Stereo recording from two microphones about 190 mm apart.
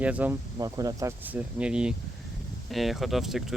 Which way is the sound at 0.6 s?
20° right (ahead or behind).